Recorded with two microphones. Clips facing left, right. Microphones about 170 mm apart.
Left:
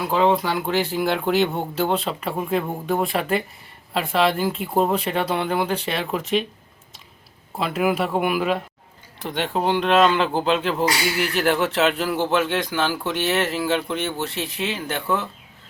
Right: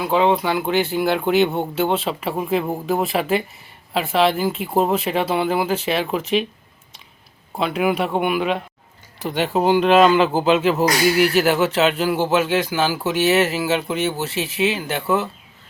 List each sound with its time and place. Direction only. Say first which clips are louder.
0.0 s speech: right 2 dB; centre (ahead or behind)
7.5 s speech: right 2 dB; centre (ahead or behind)
10.8 s speech: right 5 dB; 40° right (ahead or behind)
11.2 s speech: right 2 dB; 5° right (ahead or behind)